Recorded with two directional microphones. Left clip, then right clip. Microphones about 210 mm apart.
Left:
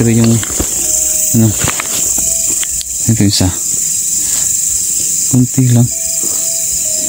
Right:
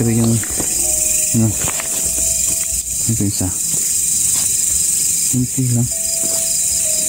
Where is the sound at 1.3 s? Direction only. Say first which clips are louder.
Left 6 dB; 35° left (ahead or behind).